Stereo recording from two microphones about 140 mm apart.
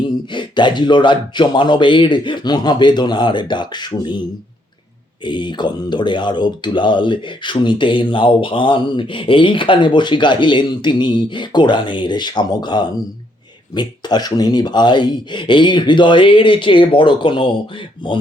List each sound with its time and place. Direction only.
0.3 s speech: 35° left (ahead or behind)
5.2 s speech: 35° left (ahead or behind)